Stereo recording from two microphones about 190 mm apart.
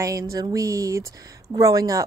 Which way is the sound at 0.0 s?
15° right (ahead or behind).